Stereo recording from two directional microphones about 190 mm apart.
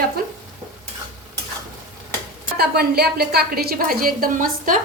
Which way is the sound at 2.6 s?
55° right (ahead or behind).